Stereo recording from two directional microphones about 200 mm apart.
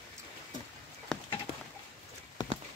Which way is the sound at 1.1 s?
5° left (ahead or behind).